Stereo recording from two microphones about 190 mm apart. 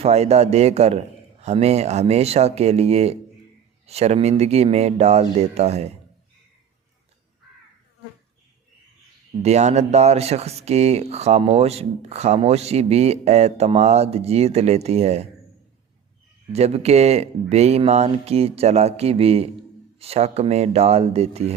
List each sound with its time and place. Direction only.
0.0 s speech: 35° right (ahead or behind)
9.4 s speech: 35° right (ahead or behind)
16.5 s speech: 35° right (ahead or behind)